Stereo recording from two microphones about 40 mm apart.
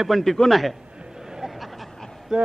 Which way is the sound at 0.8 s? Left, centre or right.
Right.